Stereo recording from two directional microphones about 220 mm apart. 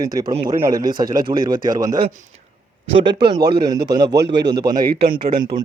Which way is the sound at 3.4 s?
45° right (ahead or behind).